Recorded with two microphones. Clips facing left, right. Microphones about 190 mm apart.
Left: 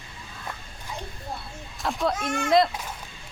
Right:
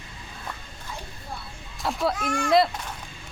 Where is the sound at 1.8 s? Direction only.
Centre (ahead or behind).